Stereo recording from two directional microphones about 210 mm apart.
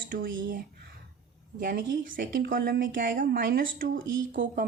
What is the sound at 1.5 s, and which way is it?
A woman's voice, 40° right (ahead or behind).